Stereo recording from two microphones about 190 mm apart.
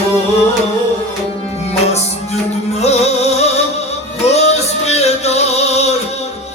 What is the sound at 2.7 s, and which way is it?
Music, 35° left (ahead or behind).